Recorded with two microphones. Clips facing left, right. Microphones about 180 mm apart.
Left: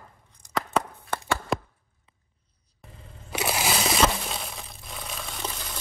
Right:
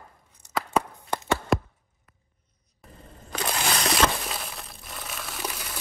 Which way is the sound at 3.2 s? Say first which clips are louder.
Left 2 dB; 5° left (ahead or behind).